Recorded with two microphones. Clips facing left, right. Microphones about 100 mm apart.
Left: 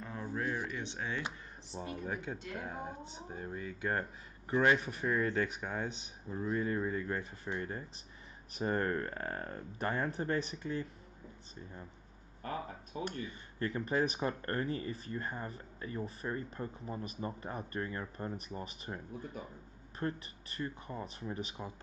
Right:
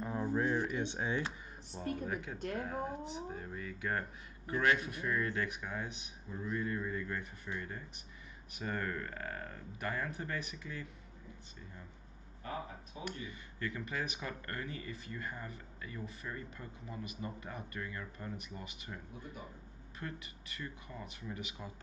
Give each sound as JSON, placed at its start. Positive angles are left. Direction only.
{"t": 0.0, "sound": "speech", "side_deg": -15}
{"t": 1.7, "sound": "speech", "side_deg": 20}
{"t": 2.6, "sound": "speech", "side_deg": 5}
{"t": 3.4, "sound": "speech", "side_deg": 20}
{"t": 13.0, "sound": "speech", "side_deg": 35}